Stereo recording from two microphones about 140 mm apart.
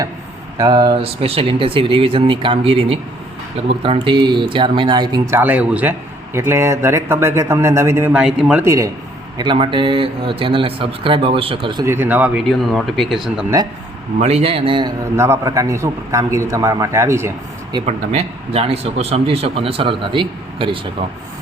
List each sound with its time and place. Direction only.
0.5 s a man's voice: 30° right (ahead or behind)
0.9 s a man's voice: 45° right (ahead or behind); by 8.1 s 20° right (ahead or behind)
8.1 s speech: 5° right (ahead or behind)
8.6 s a man's voice: 25° right (ahead or behind)
9.4 s speech: 35° right (ahead or behind)
11.9 s speech: 15° right (ahead or behind)
12.5 s speech: centre (ahead or behind)
14.2 s speech: 50° right (ahead or behind)
15.1 s a man's voice: 20° right (ahead or behind)
17.8 s speech: 50° right (ahead or behind)